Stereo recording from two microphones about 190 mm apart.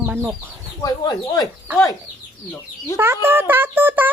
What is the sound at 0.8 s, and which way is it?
Speech, 20° left (ahead or behind).